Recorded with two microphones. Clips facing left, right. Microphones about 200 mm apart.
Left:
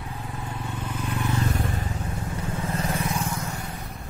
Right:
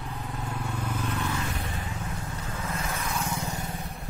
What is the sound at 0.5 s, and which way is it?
Vehicle, 10° left (ahead or behind).